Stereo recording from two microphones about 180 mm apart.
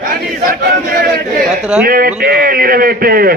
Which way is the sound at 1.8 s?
55° right (ahead or behind).